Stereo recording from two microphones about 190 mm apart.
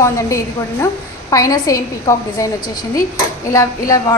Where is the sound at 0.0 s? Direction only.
15° left (ahead or behind).